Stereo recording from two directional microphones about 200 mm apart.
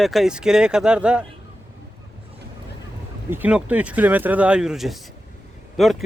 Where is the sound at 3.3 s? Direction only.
10° right (ahead or behind).